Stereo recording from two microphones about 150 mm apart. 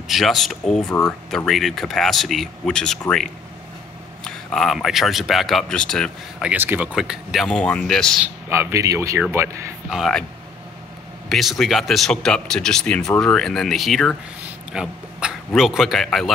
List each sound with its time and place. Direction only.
0.1 s speech: centre (ahead or behind)
6.4 s speech: 10° right (ahead or behind); by 8.2 s 5° left (ahead or behind)
8.5 s speech: 15° right (ahead or behind)
9.8 s speech: centre (ahead or behind)
11.2 s a man's voice: centre (ahead or behind)